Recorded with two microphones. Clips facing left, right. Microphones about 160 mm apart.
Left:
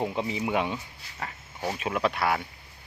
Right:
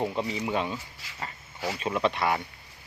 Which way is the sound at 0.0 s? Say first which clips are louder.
Even; 15° left (ahead or behind).